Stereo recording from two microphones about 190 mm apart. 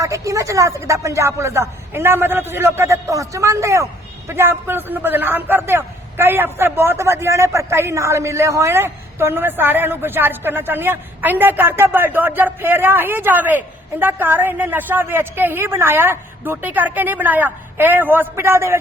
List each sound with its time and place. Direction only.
0.0 s a man's voice: 15° right (ahead or behind)